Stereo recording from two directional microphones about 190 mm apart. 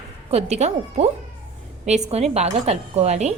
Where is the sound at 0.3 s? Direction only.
35° right (ahead or behind).